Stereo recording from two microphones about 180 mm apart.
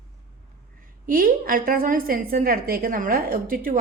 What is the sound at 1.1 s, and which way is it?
A woman's voice, 50° right (ahead or behind).